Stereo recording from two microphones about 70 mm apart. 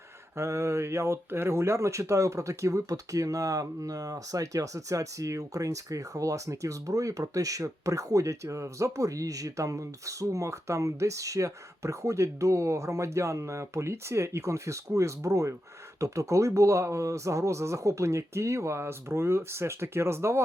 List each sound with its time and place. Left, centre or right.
0.3 s speech: right